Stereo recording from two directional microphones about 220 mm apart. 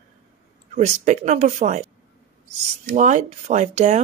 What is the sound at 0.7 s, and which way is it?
Speech, 30° right (ahead or behind).